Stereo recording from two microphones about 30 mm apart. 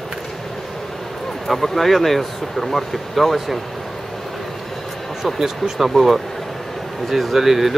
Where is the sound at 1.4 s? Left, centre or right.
Centre.